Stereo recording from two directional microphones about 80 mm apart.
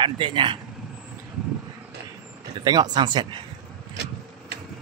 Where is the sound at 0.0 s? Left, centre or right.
Right.